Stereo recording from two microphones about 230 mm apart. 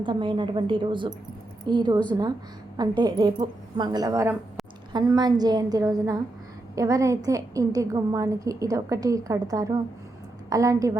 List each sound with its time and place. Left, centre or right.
0.0 s a woman's voice: right